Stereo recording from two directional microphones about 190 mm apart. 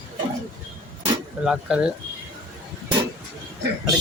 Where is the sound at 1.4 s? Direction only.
5° right (ahead or behind).